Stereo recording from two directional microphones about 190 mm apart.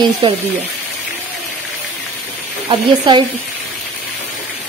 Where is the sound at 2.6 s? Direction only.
25° right (ahead or behind).